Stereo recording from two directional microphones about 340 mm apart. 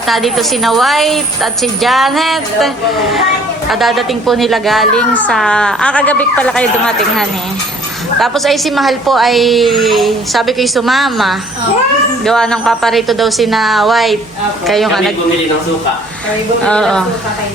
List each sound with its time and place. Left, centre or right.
0.1 s a woman's voice: centre
16.6 s a woman's voice: centre